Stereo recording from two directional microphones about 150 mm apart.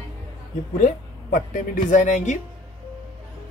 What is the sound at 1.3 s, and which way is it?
Speech, 60° left (ahead or behind).